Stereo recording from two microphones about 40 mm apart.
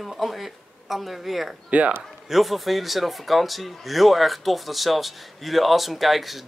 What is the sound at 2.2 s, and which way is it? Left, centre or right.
Speech, centre.